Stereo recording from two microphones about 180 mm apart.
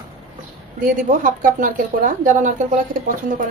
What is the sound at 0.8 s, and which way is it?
Speech, 45° right (ahead or behind).